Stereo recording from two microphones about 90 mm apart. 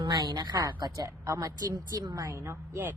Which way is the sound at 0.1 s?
45° right (ahead or behind).